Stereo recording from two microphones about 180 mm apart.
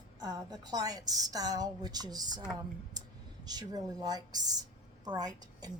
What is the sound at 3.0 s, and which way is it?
Clicking, 20° right (ahead or behind).